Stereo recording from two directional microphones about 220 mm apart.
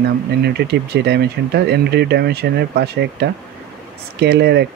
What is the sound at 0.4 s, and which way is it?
Speech, 50° right (ahead or behind).